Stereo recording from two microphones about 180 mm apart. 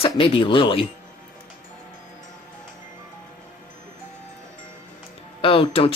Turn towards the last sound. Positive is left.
turn(degrees=35)  # may be behind; listen again after turning